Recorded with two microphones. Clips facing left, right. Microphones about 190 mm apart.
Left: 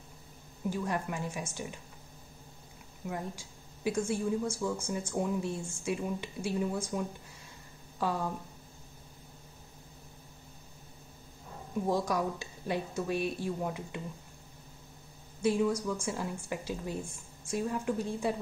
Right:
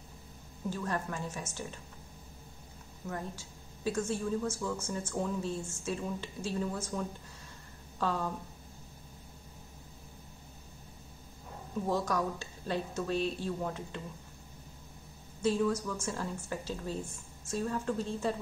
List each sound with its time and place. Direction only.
0.7 s speech: 15° left (ahead or behind)
3.1 s speech: 15° left (ahead or behind)
11.9 s speech: 10° left (ahead or behind)
15.4 s speech: 15° left (ahead or behind)